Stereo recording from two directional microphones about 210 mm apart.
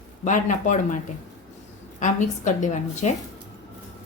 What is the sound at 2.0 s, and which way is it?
A woman's voice, 35° left (ahead or behind).